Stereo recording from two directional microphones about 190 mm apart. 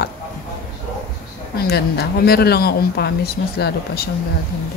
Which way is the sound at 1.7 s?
55° left (ahead or behind).